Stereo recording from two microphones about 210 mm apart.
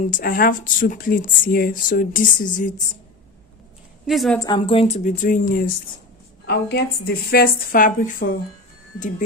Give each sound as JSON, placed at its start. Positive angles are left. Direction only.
{"t": 0.1, "sound": "speech", "side_deg": 45}
{"t": 4.0, "sound": "a woman's voice", "side_deg": 0}
{"t": 4.4, "sound": "speech", "side_deg": 20}
{"t": 6.4, "sound": "a woman's voice", "side_deg": 50}